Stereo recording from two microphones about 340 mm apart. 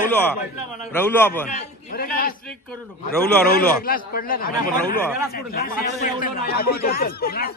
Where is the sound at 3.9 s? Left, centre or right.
Left.